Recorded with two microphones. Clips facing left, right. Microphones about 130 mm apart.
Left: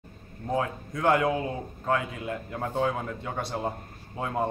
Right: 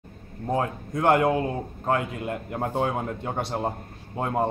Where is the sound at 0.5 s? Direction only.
40° right (ahead or behind).